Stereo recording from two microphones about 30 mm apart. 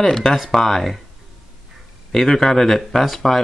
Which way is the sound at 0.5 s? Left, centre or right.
Centre.